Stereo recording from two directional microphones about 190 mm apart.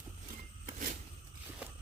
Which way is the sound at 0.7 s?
50° right (ahead or behind).